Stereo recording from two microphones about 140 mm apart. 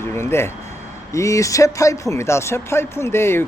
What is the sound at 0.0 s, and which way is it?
Speech, 20° left (ahead or behind).